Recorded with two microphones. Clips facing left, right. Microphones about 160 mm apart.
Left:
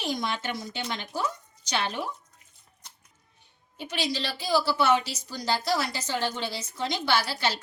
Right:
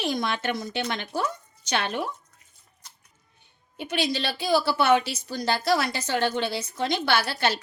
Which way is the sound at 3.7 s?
55° right (ahead or behind).